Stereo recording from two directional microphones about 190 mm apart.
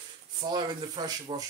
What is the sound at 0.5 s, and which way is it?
Speech, 20° right (ahead or behind).